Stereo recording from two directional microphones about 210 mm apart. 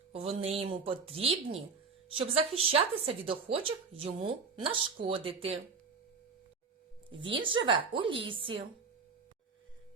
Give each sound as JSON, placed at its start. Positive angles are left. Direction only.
{"t": 0.1, "sound": "speech", "side_deg": -30}
{"t": 7.2, "sound": "speech", "side_deg": -25}